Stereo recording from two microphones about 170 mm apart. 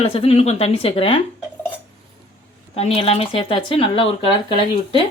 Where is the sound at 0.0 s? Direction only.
35° left (ahead or behind).